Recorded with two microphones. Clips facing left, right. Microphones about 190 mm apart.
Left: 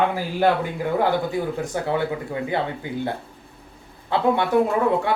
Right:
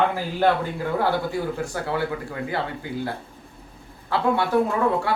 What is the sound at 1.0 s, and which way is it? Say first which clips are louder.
Speech: left 2 dB; 20° left (ahead or behind).